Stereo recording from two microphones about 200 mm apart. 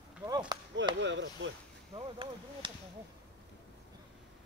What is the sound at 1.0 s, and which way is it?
Speech, 65° right (ahead or behind).